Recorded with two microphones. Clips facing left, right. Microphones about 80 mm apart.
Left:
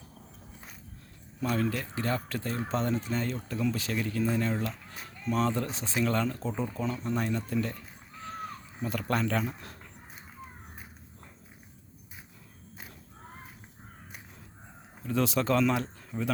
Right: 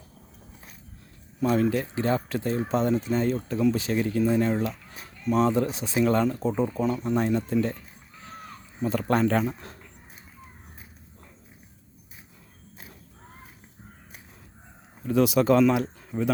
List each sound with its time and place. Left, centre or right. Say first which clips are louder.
1.4 s speech: right 7 dB; right
8.8 s speech: right 7 dB; right
15.0 s speech: right 7 dB; centre